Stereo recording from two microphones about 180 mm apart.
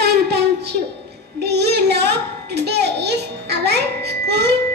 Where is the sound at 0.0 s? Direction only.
65° right (ahead or behind).